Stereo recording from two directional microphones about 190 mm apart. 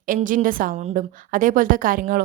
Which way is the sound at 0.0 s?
45° right (ahead or behind).